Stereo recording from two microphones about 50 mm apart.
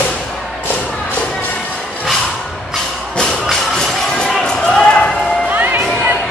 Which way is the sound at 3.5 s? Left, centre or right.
Centre.